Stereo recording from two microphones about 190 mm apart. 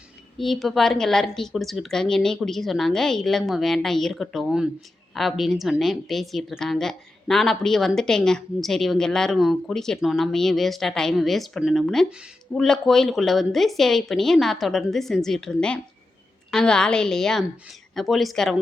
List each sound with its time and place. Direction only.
0.3 s a woman's voice: centre (ahead or behind)